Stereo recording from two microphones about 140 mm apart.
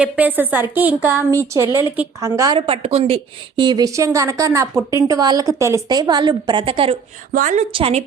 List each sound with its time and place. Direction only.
0.0 s a woman's voice: 10° right (ahead or behind)
2.6 s speech: 45° right (ahead or behind)
7.3 s a woman's voice: 60° right (ahead or behind)
7.7 s a woman's voice: 40° right (ahead or behind)